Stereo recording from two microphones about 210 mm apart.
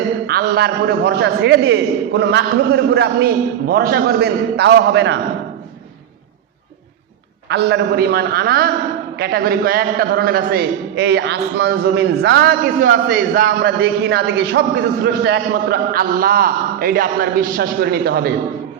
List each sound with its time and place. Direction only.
0.3 s a man's voice: 50° right (ahead or behind)
7.4 s a man's voice: 55° right (ahead or behind)